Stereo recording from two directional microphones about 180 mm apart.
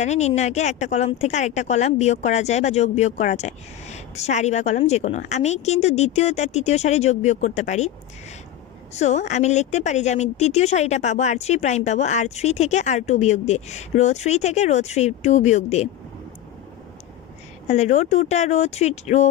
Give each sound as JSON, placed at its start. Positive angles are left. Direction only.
{"t": 0.0, "sound": "a woman's voice", "side_deg": 40}
{"t": 8.9, "sound": "a woman's voice", "side_deg": 40}
{"t": 17.6, "sound": "a woman's voice", "side_deg": 40}